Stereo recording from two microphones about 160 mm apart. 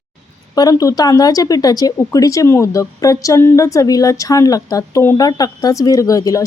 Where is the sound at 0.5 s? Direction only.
20° left (ahead or behind).